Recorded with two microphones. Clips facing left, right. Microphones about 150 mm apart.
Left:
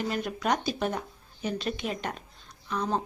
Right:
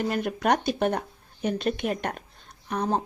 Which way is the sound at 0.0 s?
50° right (ahead or behind).